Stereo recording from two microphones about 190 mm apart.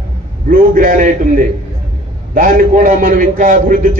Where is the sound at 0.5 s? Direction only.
45° right (ahead or behind).